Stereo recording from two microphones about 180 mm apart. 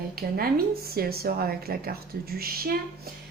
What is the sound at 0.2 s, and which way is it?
A woman's voice, 55° right (ahead or behind).